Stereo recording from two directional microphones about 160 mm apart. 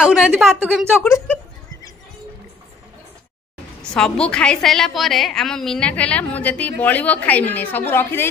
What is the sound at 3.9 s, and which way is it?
A woman's voice, 5° left (ahead or behind).